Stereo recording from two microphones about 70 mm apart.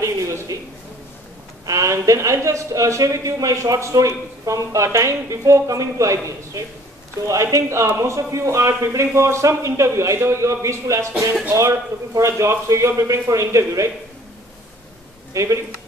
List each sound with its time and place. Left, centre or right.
0.0 s a sound: right
1.7 s a man's voice: right
15.3 s a man's voice: right